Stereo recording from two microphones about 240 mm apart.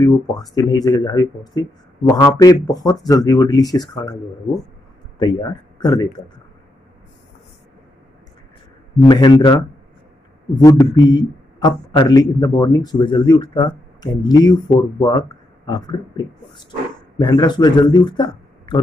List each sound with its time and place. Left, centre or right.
0.0 s speech: centre
9.0 s speech: centre